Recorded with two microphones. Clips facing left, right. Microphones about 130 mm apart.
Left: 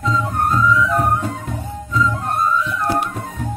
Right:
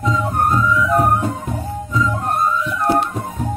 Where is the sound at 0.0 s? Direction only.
20° right (ahead or behind).